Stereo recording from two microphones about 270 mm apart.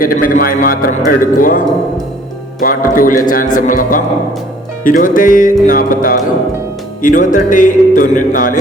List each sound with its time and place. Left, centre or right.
0.0 s a man's voice: left
1.2 s music: left
2.6 s a man's voice: left
3.2 s music: left